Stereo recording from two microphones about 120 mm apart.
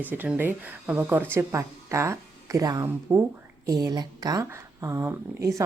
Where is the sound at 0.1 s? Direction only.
15° right (ahead or behind).